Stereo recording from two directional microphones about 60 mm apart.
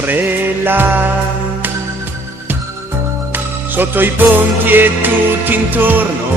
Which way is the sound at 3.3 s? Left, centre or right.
Right.